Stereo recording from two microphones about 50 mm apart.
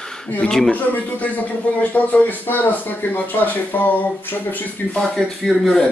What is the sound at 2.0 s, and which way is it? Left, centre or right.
Speech, left.